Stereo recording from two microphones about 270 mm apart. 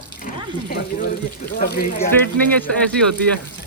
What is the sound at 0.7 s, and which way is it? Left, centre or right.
Speech, left.